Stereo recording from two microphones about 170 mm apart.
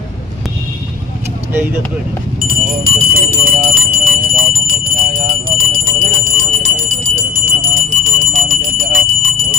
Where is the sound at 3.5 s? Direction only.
55° right (ahead or behind).